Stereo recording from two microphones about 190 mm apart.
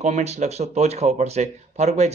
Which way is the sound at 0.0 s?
35° right (ahead or behind).